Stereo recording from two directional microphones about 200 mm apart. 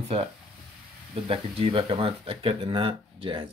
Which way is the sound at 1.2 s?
30° right (ahead or behind).